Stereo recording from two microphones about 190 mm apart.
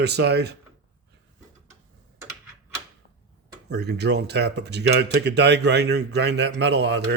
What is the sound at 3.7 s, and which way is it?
Speech, 60° right (ahead or behind).